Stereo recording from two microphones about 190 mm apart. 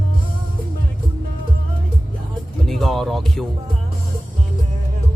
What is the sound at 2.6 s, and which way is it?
Music, centre (ahead or behind).